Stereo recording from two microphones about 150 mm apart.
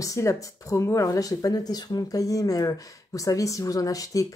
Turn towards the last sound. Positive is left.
turn(degrees=20)  # may be behind; listen again after turning